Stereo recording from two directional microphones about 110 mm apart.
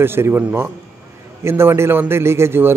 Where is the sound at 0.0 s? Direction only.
20° right (ahead or behind).